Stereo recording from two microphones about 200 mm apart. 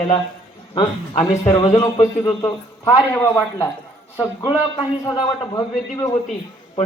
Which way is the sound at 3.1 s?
10° left (ahead or behind).